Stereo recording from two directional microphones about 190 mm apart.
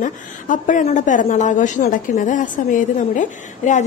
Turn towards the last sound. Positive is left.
turn(degrees=40)  # may be behind; listen again after turning